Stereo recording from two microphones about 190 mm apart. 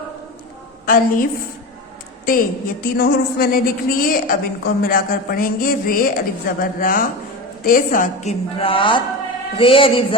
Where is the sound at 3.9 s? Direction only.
50° left (ahead or behind).